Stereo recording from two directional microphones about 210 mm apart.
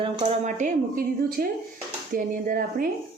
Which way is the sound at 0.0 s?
25° right (ahead or behind).